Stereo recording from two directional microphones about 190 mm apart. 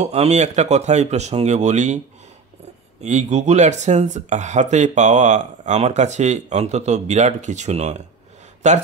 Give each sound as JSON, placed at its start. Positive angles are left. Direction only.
{"t": 0.0, "sound": "speech", "side_deg": -35}
{"t": 3.0, "sound": "speech", "side_deg": -35}